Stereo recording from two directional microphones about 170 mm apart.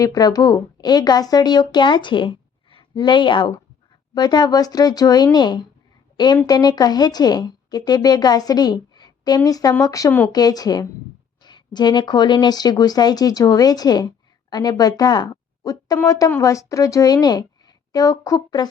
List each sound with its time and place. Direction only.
0.0 s a woman's voice: 20° left (ahead or behind)